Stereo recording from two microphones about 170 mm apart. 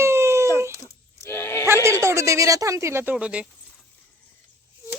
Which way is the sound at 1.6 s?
15° right (ahead or behind).